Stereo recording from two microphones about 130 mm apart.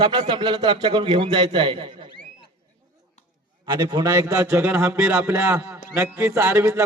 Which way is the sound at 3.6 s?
30° right (ahead or behind).